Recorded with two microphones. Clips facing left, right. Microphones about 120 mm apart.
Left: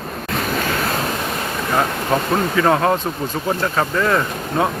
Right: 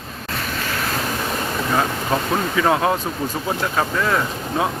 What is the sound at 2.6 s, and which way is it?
Speech, 5° right (ahead or behind).